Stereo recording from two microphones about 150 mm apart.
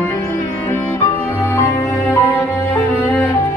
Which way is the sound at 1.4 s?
15° left (ahead or behind).